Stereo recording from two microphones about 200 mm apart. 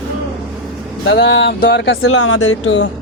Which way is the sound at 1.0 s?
60° left (ahead or behind).